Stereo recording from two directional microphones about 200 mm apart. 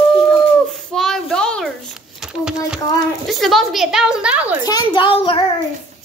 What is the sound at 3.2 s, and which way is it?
A woman's voice, centre (ahead or behind).